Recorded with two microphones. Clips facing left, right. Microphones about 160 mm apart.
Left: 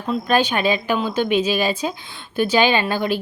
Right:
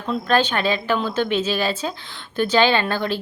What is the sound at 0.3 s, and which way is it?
Speech, 15° left (ahead or behind).